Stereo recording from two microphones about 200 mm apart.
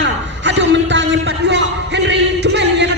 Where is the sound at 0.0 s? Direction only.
65° right (ahead or behind).